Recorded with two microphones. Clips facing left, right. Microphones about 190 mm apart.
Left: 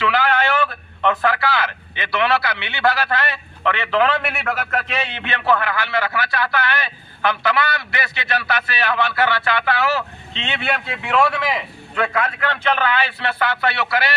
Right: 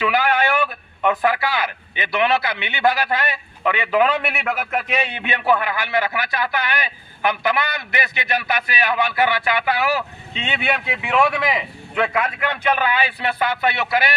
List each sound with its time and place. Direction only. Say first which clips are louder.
0.0 s a sound: even; 15° right (ahead or behind)
1.2 s a man's voice: even; 15° right (ahead or behind)
4.2 s a man's voice: right 1 dB; centre (ahead or behind)
4.4 s a man's voice: even; 15° right (ahead or behind)